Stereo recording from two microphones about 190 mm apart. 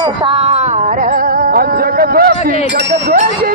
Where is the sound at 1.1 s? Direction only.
50° right (ahead or behind).